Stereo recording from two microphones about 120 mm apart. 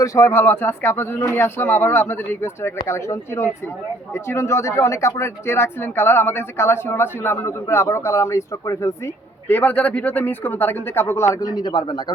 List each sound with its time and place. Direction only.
0.0 s speech: 25° left (ahead or behind)
9.5 s speech: 15° left (ahead or behind); by 12.1 s 40° left (ahead or behind)